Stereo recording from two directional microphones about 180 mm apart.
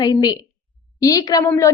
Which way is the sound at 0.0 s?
25° left (ahead or behind).